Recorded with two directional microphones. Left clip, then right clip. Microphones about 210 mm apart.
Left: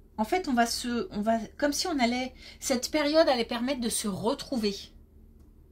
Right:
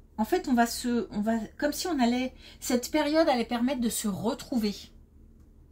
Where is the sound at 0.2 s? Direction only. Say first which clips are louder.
Even; 30° left (ahead or behind).